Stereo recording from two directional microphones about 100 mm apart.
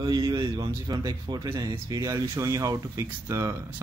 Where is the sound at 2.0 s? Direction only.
30° right (ahead or behind).